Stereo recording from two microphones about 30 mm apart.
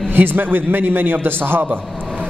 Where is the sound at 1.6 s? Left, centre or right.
Right.